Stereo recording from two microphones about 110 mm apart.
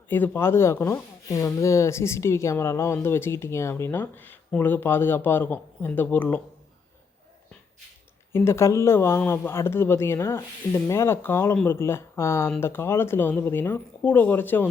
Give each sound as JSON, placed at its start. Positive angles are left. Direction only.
{"t": 0.1, "sound": "speech", "side_deg": 20}
{"t": 8.3, "sound": "speech", "side_deg": 25}